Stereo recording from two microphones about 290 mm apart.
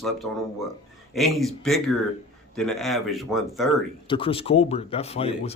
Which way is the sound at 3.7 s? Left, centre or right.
Centre.